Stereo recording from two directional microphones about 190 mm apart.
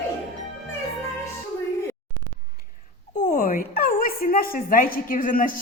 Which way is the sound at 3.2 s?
45° left (ahead or behind).